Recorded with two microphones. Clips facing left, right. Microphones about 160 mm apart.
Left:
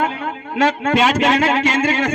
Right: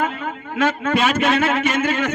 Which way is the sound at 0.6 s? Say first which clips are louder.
Left 3 dB; 30° left (ahead or behind).